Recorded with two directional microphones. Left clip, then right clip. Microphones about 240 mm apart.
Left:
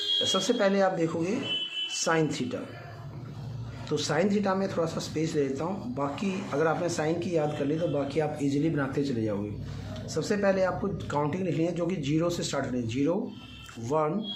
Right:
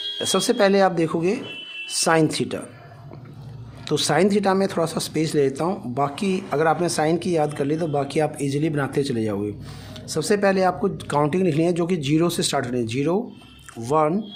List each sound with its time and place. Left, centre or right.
0.2 s speech: right
3.8 s speech: right